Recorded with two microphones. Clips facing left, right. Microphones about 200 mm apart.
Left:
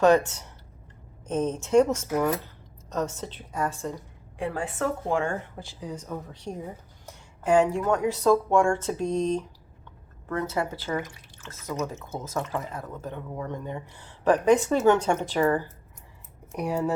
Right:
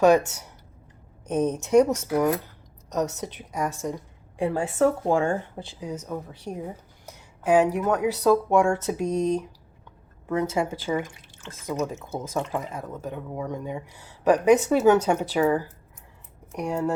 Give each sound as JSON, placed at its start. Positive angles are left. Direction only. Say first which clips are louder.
{"t": 0.0, "sound": "speech", "louder": "right 1 dB", "side_deg": -10}
{"t": 4.4, "sound": "a woman's voice", "louder": "right 6 dB", "side_deg": -25}
{"t": 6.0, "sound": "speech", "louder": "right 2 dB", "side_deg": -5}
{"t": 10.5, "sound": "speech", "louder": "right 3 dB", "side_deg": -15}